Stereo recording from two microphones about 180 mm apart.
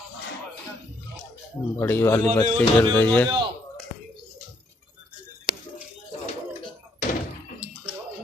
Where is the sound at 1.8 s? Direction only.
15° left (ahead or behind).